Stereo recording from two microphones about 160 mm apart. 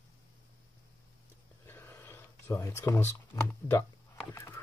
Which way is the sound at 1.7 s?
15° left (ahead or behind).